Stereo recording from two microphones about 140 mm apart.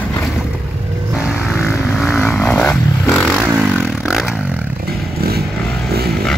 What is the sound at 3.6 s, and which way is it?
Vehicle, 5° right (ahead or behind).